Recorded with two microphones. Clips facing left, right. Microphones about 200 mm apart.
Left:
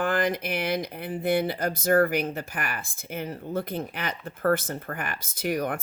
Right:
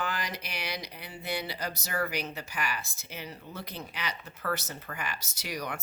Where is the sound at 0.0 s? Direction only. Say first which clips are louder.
Left 10 dB; 55° left (ahead or behind).